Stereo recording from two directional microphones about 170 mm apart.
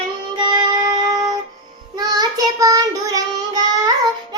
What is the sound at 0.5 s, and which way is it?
Music, 25° right (ahead or behind).